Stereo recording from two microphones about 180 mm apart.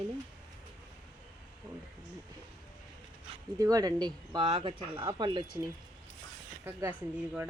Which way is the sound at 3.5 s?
20° right (ahead or behind).